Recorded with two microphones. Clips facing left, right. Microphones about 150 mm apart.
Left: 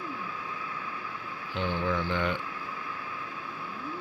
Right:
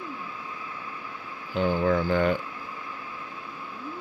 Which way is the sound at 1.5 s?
40° right (ahead or behind).